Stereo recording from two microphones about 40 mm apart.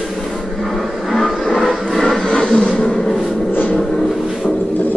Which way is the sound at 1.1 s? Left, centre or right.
Centre.